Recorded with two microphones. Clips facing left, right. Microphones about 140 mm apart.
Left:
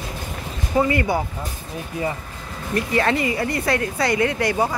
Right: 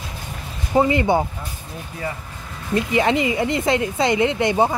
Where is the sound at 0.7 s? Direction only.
25° right (ahead or behind).